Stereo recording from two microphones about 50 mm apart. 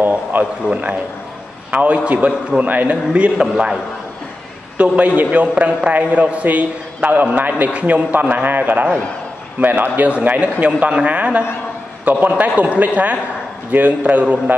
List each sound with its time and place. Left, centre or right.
0.3 s a man's voice: right
3.1 s a man's voice: centre
4.7 s a man's voice: right